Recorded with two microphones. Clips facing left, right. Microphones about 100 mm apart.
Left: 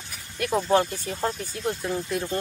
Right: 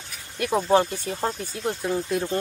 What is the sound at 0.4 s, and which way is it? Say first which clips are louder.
Speech: right 2 dB; 10° right (ahead or behind).